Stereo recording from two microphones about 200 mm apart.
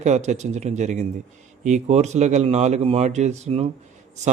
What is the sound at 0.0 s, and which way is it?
A man's voice, 35° right (ahead or behind).